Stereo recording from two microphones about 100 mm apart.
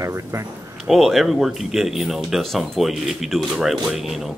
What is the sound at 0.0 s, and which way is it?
Speech, 30° right (ahead or behind).